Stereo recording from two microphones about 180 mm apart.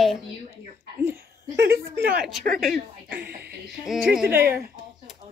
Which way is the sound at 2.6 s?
55° right (ahead or behind).